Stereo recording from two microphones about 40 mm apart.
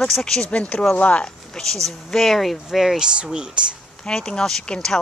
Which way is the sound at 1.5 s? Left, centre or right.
Centre.